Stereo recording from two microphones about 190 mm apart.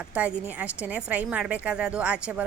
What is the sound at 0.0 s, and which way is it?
A woman's voice, 5° right (ahead or behind).